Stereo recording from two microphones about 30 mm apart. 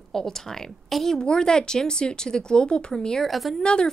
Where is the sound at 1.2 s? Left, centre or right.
Left.